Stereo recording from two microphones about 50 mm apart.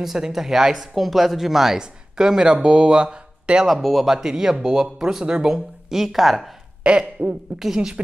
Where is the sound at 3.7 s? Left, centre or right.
Centre.